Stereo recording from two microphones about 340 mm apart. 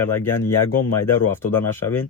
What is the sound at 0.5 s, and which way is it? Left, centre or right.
Speech, left.